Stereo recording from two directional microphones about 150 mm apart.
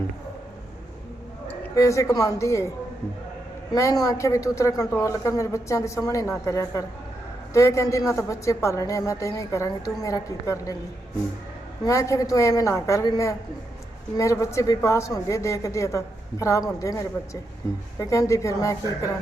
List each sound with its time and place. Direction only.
1.5 s a man's voice: 20° left (ahead or behind)
3.8 s a woman's voice: 20° left (ahead or behind)
11.9 s a woman's voice: 20° left (ahead or behind)